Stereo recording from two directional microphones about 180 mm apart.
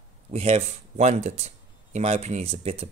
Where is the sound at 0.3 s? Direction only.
35° right (ahead or behind).